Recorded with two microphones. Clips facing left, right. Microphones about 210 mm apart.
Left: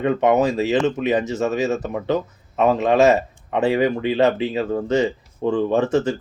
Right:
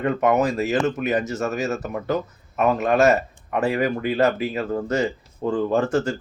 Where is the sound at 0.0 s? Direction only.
20° left (ahead or behind).